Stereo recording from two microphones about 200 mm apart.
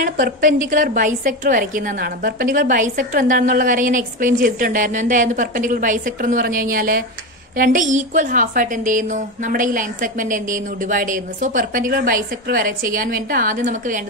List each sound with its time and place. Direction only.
0.0 s a woman's voice: 45° right (ahead or behind)